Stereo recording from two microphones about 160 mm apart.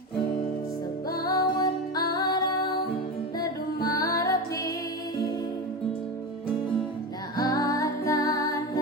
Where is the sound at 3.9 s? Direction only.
20° left (ahead or behind).